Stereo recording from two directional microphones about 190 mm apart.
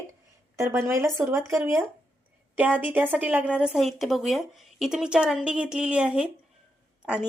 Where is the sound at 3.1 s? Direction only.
10° right (ahead or behind).